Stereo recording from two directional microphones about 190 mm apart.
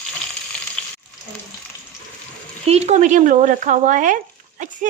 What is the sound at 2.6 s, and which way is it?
Speech, 35° right (ahead or behind).